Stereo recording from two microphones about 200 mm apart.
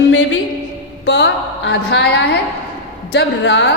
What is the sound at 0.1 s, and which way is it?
Music, 70° left (ahead or behind).